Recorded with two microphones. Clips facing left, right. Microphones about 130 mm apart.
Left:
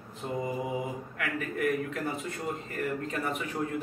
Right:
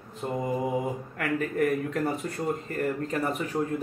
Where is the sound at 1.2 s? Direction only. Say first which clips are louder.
Right 5 dB; 40° right (ahead or behind).